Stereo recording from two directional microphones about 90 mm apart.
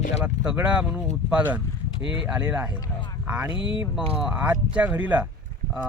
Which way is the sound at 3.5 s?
70° left (ahead or behind).